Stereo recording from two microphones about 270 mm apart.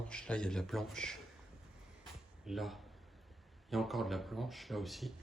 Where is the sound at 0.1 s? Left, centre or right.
Centre.